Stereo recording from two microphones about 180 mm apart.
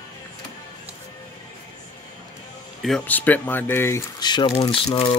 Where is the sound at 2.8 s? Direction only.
5° left (ahead or behind); by 5.1 s 30° left (ahead or behind).